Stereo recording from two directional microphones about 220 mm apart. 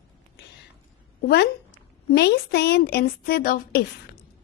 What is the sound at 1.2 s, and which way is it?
A woman's voice, 50° left (ahead or behind).